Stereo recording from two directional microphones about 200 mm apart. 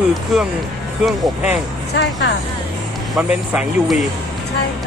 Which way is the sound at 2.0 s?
60° left (ahead or behind).